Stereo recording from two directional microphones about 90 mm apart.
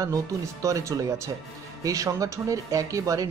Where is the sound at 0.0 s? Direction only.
40° right (ahead or behind).